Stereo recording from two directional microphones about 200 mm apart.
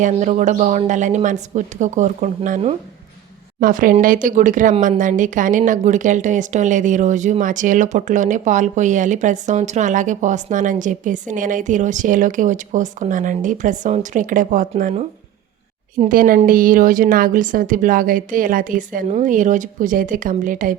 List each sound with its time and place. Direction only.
0.0 s a woman's voice: 35° right (ahead or behind)